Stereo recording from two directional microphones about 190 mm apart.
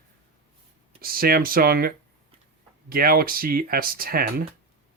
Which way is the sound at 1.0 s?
50° right (ahead or behind).